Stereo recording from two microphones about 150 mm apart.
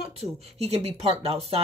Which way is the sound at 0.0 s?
40° right (ahead or behind).